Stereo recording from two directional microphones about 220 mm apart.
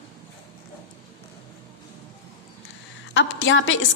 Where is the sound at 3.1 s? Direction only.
60° left (ahead or behind).